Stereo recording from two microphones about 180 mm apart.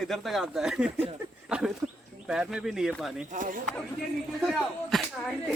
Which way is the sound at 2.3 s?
5° right (ahead or behind).